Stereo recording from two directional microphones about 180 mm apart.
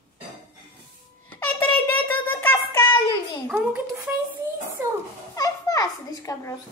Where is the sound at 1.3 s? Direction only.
10° left (ahead or behind).